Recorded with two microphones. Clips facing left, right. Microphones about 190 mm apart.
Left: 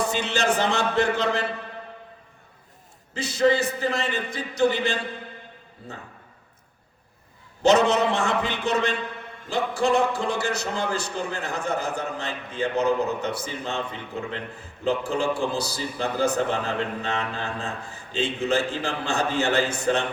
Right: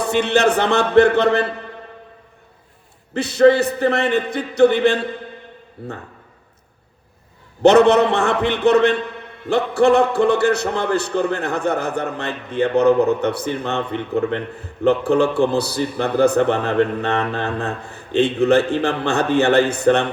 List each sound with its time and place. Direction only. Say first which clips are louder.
0.0 s a man's voice: right 8 dB; 60° right (ahead or behind)
3.2 s a man's voice: right 8 dB; 60° right (ahead or behind)
7.6 s a man's voice: right 7 dB; 60° right (ahead or behind)